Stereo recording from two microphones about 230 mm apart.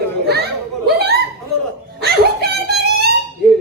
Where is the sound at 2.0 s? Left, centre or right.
Right.